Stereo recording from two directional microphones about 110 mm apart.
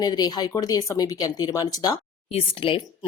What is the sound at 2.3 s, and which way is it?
Speech, 55° left (ahead or behind).